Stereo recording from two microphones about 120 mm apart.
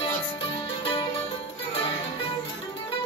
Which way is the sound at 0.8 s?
45° left (ahead or behind).